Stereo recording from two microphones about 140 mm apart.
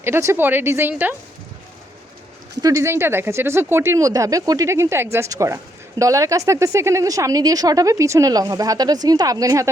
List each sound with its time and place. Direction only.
0.0 s speech: 20° right (ahead or behind)
2.6 s speech: 25° right (ahead or behind)